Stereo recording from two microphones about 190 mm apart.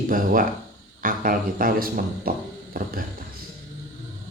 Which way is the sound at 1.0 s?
45° right (ahead or behind).